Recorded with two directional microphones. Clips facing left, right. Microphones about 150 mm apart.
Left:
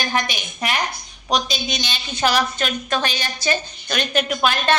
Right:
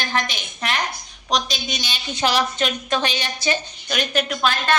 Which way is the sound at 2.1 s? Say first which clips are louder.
Left 1 dB; 20° right (ahead or behind).